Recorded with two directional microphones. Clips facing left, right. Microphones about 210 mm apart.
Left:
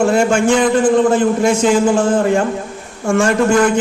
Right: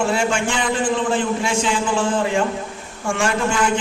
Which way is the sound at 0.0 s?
40° left (ahead or behind).